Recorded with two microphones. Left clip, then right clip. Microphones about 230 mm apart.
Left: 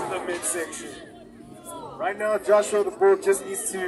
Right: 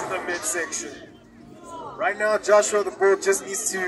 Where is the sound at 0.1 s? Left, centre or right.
Right.